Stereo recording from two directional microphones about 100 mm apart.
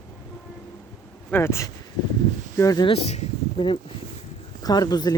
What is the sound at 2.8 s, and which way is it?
Speech, 70° left (ahead or behind).